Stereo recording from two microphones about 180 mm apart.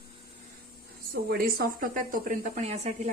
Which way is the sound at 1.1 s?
60° right (ahead or behind).